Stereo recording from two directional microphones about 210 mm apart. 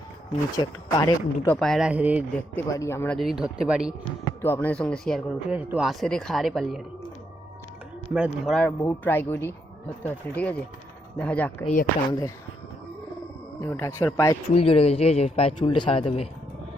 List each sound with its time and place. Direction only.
0.6 s speech: 20° left (ahead or behind)
1.5 s speech: centre (ahead or behind)
2.6 s speech: 15° left (ahead or behind)
3.2 s speech: centre (ahead or behind)
4.4 s speech: 10° left (ahead or behind)
8.1 s speech: 5° right (ahead or behind)
8.8 s speech: 10° left (ahead or behind)
12.0 s a man's voice: 20° left (ahead or behind)
13.6 s speech: 10° left (ahead or behind)
14.5 s a man's voice: 25° left (ahead or behind)